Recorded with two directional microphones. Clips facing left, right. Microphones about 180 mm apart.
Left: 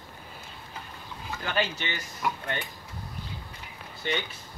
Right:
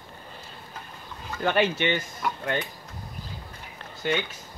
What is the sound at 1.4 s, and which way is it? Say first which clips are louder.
Speech: right 7 dB; 60° right (ahead or behind).